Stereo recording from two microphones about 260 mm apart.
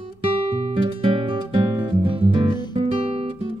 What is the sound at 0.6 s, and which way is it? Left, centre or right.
Music, centre.